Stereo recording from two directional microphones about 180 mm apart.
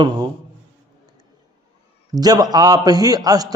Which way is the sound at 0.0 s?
20° right (ahead or behind).